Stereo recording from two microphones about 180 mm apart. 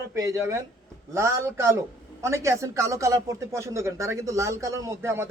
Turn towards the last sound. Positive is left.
turn(degrees=-15)  # may be behind; listen again after turning